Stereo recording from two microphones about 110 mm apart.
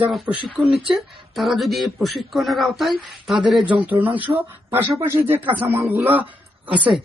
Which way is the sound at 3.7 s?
15° right (ahead or behind).